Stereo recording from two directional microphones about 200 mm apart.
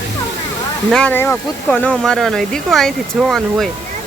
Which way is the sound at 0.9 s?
5° left (ahead or behind).